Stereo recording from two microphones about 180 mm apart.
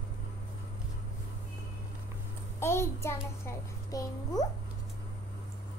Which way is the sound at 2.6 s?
15° left (ahead or behind).